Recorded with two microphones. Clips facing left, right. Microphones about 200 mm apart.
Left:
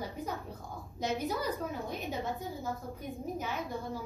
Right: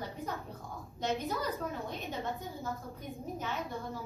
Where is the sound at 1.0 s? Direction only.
15° left (ahead or behind).